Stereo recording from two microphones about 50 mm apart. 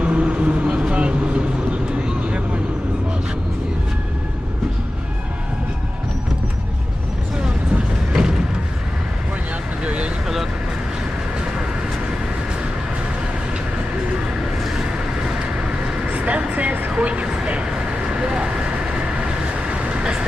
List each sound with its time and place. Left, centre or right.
0.0 s vehicle: right
7.4 s vehicle: centre
9.8 s vehicle: right
16.1 s vehicle: right
16.9 s vehicle: right